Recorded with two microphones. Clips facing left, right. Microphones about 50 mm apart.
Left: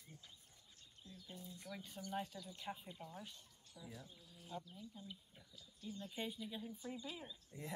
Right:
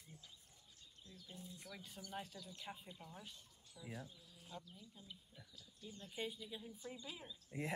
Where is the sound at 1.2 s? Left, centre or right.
Left.